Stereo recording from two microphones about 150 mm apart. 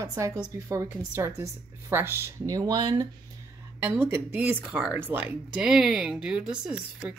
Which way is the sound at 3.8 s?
15° right (ahead or behind).